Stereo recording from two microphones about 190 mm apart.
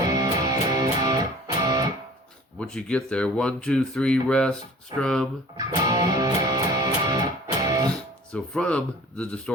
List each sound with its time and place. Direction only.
0.1 s music: 20° right (ahead or behind)
2.6 s speech: 5° left (ahead or behind)
5.5 s music: 20° right (ahead or behind)
7.9 s speech: 5° left (ahead or behind)